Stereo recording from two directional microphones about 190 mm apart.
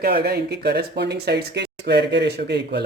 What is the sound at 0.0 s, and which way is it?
Speech, 55° right (ahead or behind).